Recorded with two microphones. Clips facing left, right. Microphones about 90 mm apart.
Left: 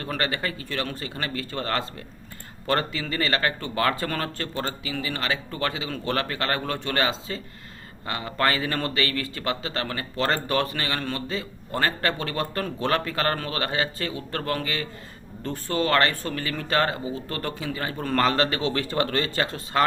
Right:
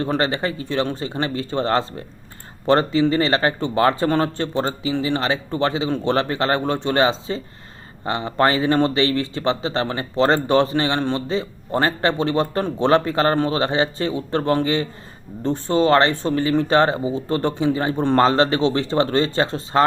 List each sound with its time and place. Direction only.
0.0 s a man's voice: 25° right (ahead or behind)